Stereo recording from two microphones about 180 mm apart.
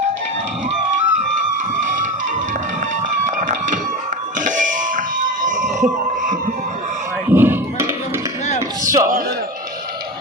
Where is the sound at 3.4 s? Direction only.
45° right (ahead or behind).